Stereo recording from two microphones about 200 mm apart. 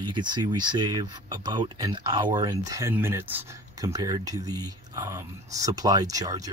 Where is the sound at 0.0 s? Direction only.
25° right (ahead or behind).